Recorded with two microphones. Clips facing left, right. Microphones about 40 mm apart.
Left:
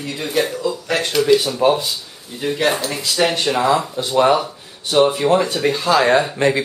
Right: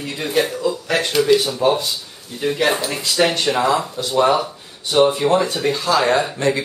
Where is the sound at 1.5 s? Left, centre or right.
Centre.